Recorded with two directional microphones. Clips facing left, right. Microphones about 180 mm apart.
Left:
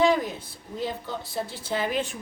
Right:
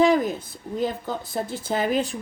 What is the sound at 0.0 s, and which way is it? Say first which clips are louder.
A woman's voice: right 3 dB; 45° right (ahead or behind).